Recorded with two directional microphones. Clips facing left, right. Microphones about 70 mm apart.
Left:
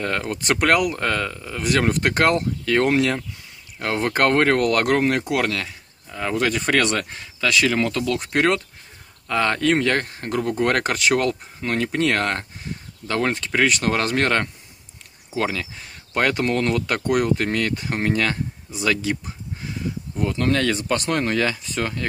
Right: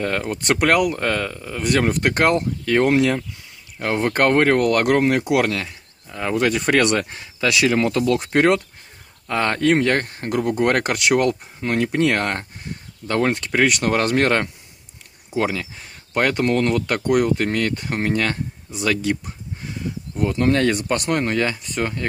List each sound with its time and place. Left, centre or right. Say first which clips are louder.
0.0 s speech: right 2 dB; centre
5.7 s speech: even; centre; by 8.6 s right
9.3 s speech: right 1 dB; centre
20.2 s speech: right 3 dB; centre